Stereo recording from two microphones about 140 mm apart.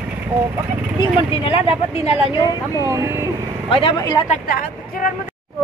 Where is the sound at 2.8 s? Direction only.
20° right (ahead or behind).